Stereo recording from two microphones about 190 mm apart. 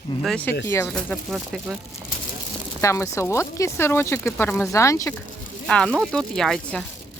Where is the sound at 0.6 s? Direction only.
15° left (ahead or behind).